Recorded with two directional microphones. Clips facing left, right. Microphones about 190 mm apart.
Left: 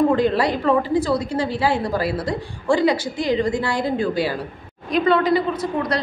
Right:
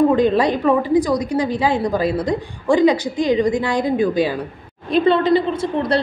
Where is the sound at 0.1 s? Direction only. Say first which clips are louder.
Right 3 dB; 20° right (ahead or behind).